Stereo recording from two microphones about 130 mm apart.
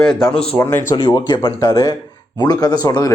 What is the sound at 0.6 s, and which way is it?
Speech, 20° left (ahead or behind).